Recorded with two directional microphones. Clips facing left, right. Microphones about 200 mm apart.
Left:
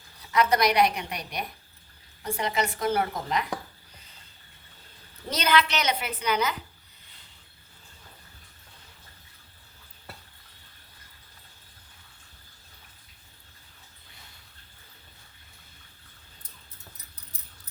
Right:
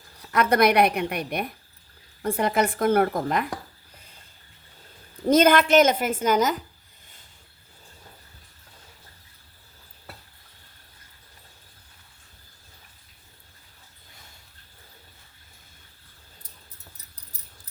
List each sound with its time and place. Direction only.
0.3 s a woman's voice: 55° right (ahead or behind)
5.3 s a woman's voice: 50° right (ahead or behind)